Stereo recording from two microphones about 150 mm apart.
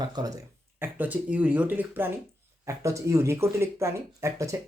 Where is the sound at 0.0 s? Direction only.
25° right (ahead or behind).